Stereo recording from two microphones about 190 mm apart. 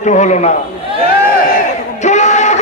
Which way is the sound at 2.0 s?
40° left (ahead or behind).